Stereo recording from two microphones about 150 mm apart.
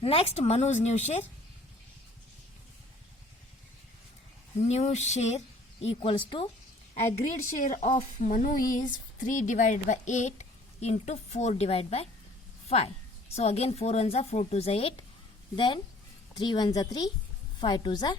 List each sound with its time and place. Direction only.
0.0 s speech: 40° left (ahead or behind)
4.7 s a woman's voice: 45° left (ahead or behind)
7.6 s a woman's voice: 60° left (ahead or behind); by 18.2 s 30° left (ahead or behind)